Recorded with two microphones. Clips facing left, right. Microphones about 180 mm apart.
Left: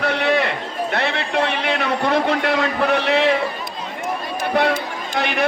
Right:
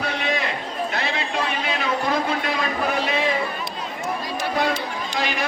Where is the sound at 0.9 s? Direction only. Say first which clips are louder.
Left 7 dB; 60° left (ahead or behind).